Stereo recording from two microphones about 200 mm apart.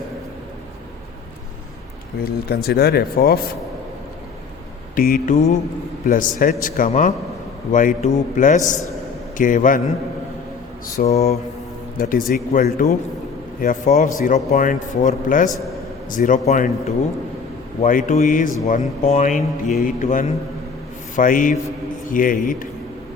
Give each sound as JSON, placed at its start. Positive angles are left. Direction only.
{"t": 2.2, "sound": "speech", "side_deg": 50}
{"t": 4.9, "sound": "speech", "side_deg": 45}
{"t": 11.1, "sound": "speech", "side_deg": 30}
{"t": 11.9, "sound": "speech", "side_deg": 45}
{"t": 17.8, "sound": "speech", "side_deg": 40}